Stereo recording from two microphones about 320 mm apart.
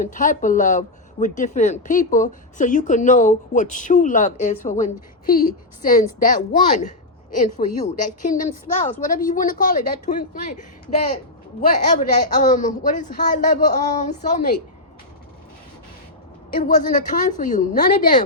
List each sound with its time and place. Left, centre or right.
0.0 s speech: left
11.9 s speech: left
16.6 s speech: left